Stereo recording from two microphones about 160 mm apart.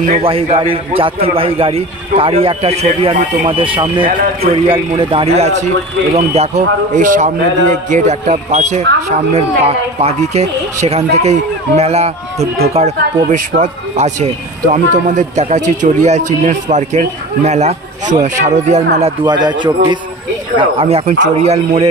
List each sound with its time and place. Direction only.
0.2 s a man's voice: 35° right (ahead or behind)
19.2 s a man's voice: 30° right (ahead or behind); by 21.8 s 45° right (ahead or behind)